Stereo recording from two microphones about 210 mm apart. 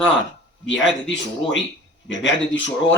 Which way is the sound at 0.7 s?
60° left (ahead or behind).